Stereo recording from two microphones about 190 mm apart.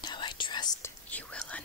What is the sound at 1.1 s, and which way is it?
Whispering, 5° left (ahead or behind).